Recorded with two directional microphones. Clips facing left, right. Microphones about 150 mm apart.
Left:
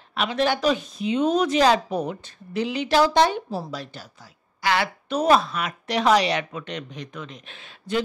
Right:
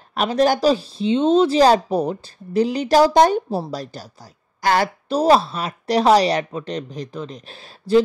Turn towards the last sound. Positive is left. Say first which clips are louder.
# right 9 dB
turn(degrees=-35)  # may be behind; listen again after turning